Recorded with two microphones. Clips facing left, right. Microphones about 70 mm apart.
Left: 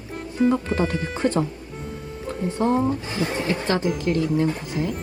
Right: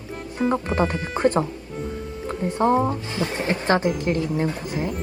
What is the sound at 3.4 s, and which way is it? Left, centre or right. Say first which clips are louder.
Speech: right 4 dB; right.